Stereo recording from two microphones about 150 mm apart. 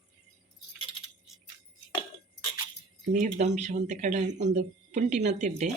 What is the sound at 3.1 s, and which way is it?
Speech, 55° right (ahead or behind).